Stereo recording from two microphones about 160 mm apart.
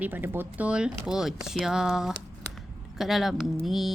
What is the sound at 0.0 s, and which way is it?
Speech, 15° right (ahead or behind).